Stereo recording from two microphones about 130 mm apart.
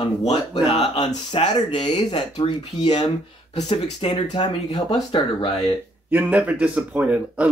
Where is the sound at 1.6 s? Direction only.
60° left (ahead or behind).